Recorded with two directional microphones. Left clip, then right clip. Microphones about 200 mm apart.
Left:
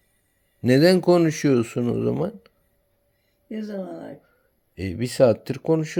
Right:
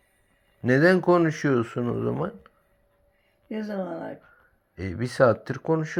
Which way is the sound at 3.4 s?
10° left (ahead or behind).